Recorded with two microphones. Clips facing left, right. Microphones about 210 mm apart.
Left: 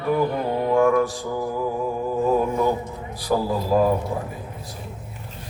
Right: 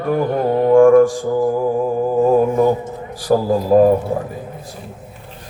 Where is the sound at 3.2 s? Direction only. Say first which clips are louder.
Right 7 dB; 45° right (ahead or behind).